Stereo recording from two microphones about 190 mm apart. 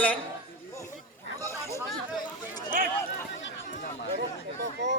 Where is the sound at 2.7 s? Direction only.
45° right (ahead or behind).